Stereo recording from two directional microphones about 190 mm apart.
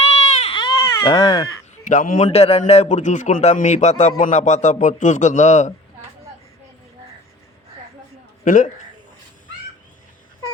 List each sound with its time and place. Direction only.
0.0 s baby cry: 35° left (ahead or behind)
0.5 s baby cry: 25° left (ahead or behind)
1.8 s a man's voice: 45° left (ahead or behind)
8.4 s speech: 45° left (ahead or behind)